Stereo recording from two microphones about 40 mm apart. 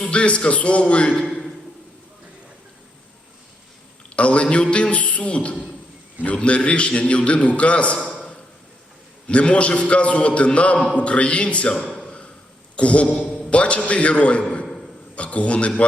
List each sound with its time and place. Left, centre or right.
0.0 s a man's voice: left
4.1 s a man's voice: left
9.2 s a man's voice: left
12.7 s a man's voice: left